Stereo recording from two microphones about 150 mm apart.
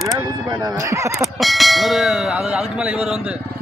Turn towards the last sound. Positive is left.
turn(degrees=-5)  # may be behind; listen again after turning